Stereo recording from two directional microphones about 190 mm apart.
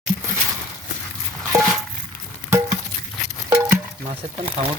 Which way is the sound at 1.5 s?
Centre (ahead or behind).